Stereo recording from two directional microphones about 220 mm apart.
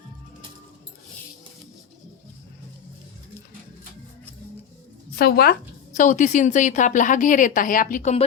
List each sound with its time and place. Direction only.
5.1 s a woman's voice: 45° left (ahead or behind)
5.9 s a woman's voice: 35° left (ahead or behind)